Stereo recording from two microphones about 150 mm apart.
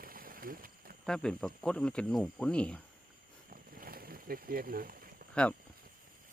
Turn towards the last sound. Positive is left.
turn(degrees=5)  # may be behind; listen again after turning